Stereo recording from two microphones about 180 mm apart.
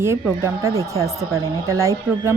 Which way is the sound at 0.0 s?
15° right (ahead or behind).